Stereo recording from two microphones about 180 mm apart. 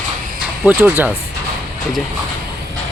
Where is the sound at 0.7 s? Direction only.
10° right (ahead or behind).